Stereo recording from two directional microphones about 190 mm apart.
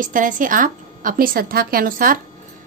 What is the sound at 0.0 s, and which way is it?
A woman's voice, 45° right (ahead or behind).